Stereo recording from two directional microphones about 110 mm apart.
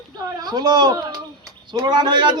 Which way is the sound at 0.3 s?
40° right (ahead or behind).